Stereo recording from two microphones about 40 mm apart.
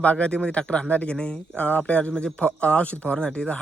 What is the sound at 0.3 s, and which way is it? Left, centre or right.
Speech, left.